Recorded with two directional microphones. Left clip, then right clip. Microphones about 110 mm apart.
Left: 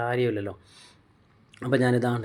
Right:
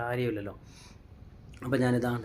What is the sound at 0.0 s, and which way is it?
Speech, 30° left (ahead or behind).